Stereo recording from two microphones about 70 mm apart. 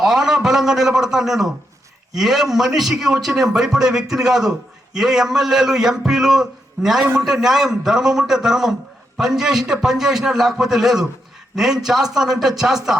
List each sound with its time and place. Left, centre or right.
0.0 s a man's voice: centre